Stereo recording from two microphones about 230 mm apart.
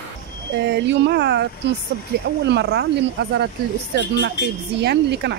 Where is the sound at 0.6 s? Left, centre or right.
Right.